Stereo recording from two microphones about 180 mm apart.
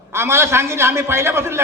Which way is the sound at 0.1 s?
15° right (ahead or behind).